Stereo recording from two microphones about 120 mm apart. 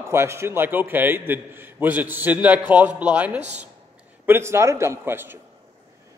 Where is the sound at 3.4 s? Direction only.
70° right (ahead or behind).